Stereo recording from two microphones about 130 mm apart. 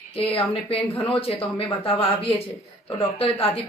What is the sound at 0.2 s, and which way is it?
Speech, 45° left (ahead or behind).